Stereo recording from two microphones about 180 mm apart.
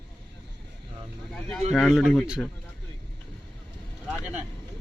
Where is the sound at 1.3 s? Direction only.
Centre (ahead or behind).